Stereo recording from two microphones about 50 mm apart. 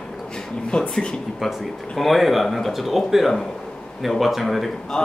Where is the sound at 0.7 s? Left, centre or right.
Centre.